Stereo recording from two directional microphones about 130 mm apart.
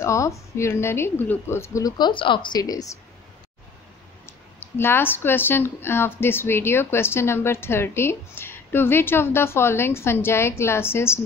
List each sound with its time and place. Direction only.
0.0 s speech: 25° left (ahead or behind)
4.3 s speech: 20° left (ahead or behind)